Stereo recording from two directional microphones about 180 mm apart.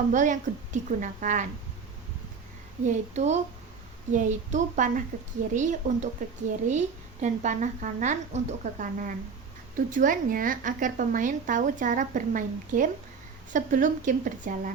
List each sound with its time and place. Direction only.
0.1 s a woman's voice: 45° right (ahead or behind)
2.8 s a woman's voice: 40° right (ahead or behind)